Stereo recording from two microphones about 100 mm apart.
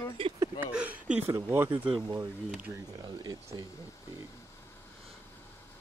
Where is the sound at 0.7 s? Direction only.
10° right (ahead or behind).